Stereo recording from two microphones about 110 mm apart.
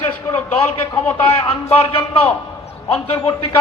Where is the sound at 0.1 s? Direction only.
15° left (ahead or behind).